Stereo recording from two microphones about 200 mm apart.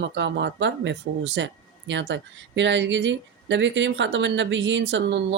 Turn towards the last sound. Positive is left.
turn(degrees=-60)  # may be behind; listen again after turning